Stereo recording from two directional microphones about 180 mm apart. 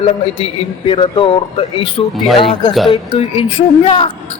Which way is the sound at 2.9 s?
30° left (ahead or behind).